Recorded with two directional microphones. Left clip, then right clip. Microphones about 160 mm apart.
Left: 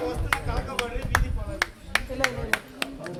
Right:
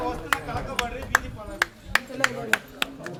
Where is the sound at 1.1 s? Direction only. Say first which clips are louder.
Right 4 dB; 20° right (ahead or behind).